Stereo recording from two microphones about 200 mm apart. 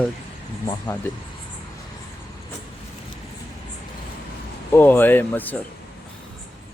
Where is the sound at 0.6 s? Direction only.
15° left (ahead or behind).